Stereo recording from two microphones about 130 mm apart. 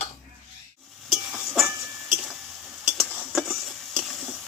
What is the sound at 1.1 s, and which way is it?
Music, centre (ahead or behind).